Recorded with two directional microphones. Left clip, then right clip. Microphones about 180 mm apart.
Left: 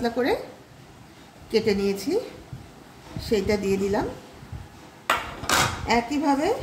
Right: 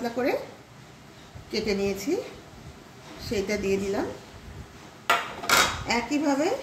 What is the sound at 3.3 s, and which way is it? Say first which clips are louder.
Speech: left 4 dB; 50° left (ahead or behind).